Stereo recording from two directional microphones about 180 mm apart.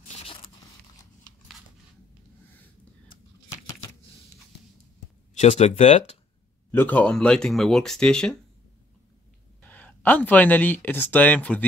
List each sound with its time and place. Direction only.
0.2 s a sound: 30° left (ahead or behind)
5.3 s speech: 40° left (ahead or behind)
6.7 s speech: 10° left (ahead or behind)
9.6 s speech: 10° left (ahead or behind)